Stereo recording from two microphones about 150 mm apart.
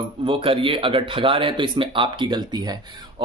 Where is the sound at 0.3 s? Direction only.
35° right (ahead or behind).